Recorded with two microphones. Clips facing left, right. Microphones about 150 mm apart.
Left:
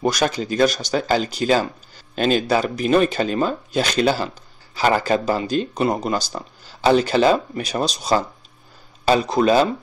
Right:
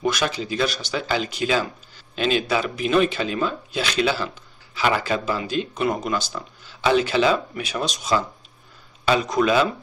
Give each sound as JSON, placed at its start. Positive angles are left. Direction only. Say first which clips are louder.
{"t": 0.0, "sound": "speech", "louder": "left 3 dB", "side_deg": 40}